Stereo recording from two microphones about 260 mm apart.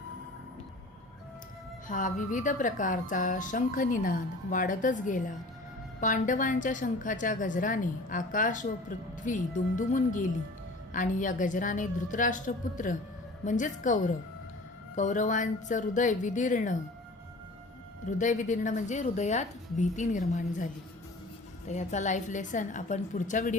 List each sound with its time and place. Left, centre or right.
1.9 s a woman's voice: left
18.2 s a woman's voice: left
21.7 s a woman's voice: left